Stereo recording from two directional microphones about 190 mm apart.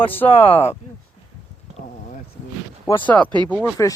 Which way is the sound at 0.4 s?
30° left (ahead or behind).